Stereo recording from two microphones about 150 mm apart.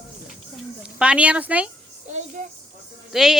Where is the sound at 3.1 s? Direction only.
Centre (ahead or behind).